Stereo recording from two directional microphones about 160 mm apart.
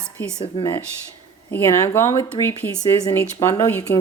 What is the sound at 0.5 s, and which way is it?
Speech, 30° left (ahead or behind).